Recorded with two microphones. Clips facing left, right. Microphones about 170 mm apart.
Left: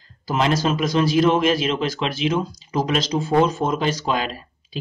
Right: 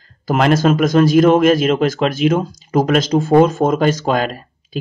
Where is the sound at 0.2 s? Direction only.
55° right (ahead or behind).